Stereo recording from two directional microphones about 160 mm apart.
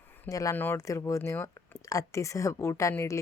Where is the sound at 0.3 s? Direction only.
20° left (ahead or behind).